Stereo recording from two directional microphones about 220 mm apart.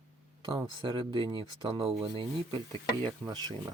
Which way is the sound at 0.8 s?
20° right (ahead or behind).